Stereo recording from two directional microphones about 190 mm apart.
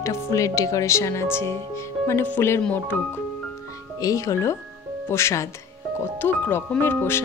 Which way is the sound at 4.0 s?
15° left (ahead or behind).